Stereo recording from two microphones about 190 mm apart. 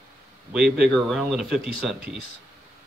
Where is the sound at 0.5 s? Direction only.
5° right (ahead or behind).